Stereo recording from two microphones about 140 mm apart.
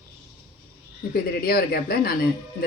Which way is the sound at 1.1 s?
90° left.